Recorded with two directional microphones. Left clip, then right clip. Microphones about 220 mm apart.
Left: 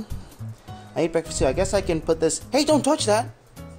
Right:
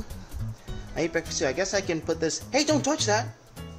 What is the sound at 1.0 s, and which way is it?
Speech, 25° left (ahead or behind).